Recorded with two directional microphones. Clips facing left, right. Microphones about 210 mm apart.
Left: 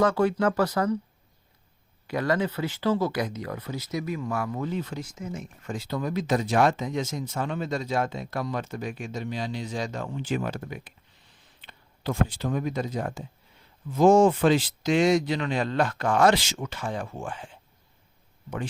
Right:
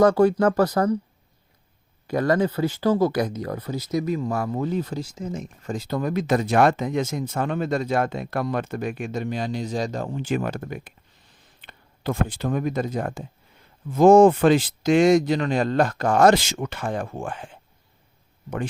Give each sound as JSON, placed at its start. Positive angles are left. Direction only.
{"t": 0.0, "sound": "speech", "side_deg": -40}
{"t": 2.0, "sound": "speech", "side_deg": -45}